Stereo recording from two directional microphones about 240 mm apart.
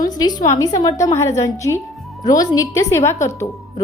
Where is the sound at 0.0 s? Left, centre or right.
Centre.